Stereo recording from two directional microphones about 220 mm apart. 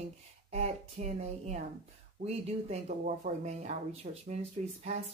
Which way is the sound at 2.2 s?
30° right (ahead or behind).